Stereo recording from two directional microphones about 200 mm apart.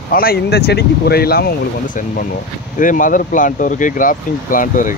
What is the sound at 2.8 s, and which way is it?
Speech, 40° left (ahead or behind).